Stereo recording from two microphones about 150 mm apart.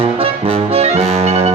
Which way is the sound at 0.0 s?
40° right (ahead or behind).